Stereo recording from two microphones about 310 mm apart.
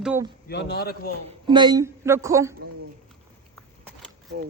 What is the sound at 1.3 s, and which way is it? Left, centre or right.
Speech, centre.